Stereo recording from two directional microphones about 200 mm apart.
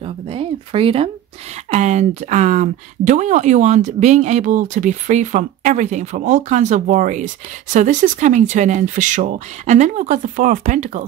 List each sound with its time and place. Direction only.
0.0 s speech: 30° right (ahead or behind)